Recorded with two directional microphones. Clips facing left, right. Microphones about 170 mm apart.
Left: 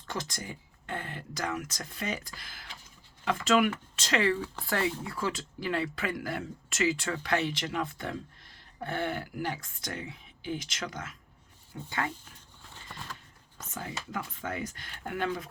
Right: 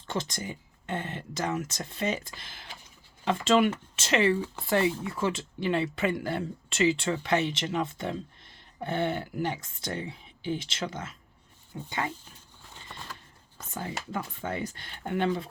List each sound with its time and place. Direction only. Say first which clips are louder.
0.1 s speech: right 4 dB; 25° right (ahead or behind)
13.7 s speech: right 3 dB; 30° right (ahead or behind)